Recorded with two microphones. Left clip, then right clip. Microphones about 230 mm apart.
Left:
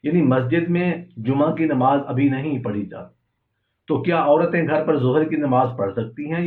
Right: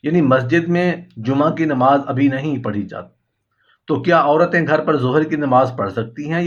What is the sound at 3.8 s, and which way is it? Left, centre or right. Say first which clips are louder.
Speech: right 4 dB; right.